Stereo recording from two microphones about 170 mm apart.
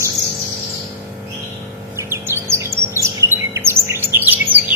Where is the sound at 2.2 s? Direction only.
15° right (ahead or behind).